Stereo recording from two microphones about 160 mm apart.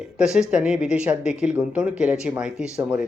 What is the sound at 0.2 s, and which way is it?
Speech, 5° right (ahead or behind).